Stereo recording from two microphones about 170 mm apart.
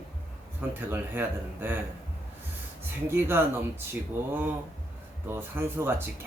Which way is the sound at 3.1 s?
15° right (ahead or behind).